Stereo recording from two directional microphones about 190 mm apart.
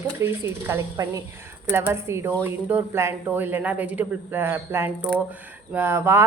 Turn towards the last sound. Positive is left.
turn(degrees=-15)  # may be behind; listen again after turning